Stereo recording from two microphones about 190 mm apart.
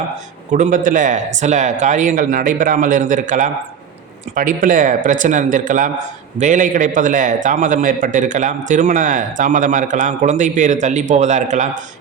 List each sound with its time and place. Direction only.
0.5 s a man's voice: 45° right (ahead or behind)